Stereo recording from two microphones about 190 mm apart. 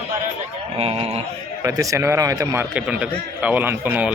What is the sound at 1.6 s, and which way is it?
A man's voice, 15° right (ahead or behind).